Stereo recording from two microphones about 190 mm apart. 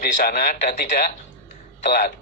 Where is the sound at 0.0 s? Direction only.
50° left (ahead or behind).